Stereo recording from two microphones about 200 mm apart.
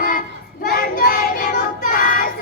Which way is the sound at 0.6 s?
50° left (ahead or behind).